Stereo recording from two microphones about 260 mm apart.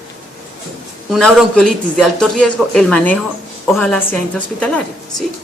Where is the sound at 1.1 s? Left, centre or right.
Centre.